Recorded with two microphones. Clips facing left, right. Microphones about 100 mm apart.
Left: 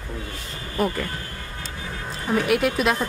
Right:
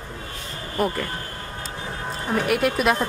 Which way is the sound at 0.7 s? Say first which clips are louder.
Even; 5° right (ahead or behind).